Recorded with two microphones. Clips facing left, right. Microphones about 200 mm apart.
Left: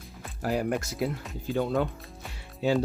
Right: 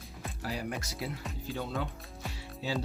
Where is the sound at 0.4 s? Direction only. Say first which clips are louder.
Left 9 dB; 55° left (ahead or behind).